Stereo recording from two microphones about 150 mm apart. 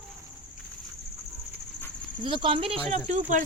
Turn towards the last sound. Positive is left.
turn(degrees=-60)  # may be behind; listen again after turning